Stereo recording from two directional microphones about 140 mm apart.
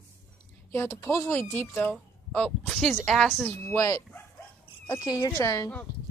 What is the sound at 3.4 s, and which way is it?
Speech, 15° left (ahead or behind).